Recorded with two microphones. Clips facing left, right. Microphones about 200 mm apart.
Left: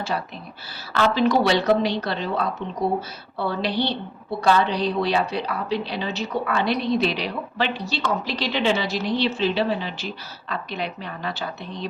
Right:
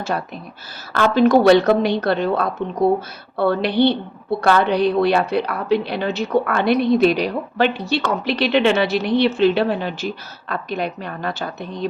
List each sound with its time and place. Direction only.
0.1 s a woman's voice: 50° right (ahead or behind)